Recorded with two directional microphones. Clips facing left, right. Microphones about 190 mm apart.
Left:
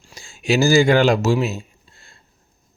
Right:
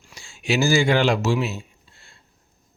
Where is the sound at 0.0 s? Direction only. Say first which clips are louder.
Left 4 dB; 40° left (ahead or behind).